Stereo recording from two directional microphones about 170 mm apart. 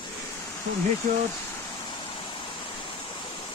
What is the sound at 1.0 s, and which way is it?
Speech, 50° right (ahead or behind).